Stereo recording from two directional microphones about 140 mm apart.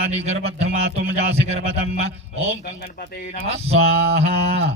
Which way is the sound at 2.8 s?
90° left.